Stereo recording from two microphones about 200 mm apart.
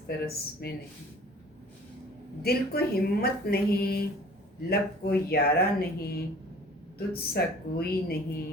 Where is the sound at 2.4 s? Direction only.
50° left (ahead or behind).